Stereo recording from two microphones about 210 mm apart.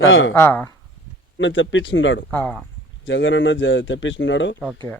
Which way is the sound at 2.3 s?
5° left (ahead or behind).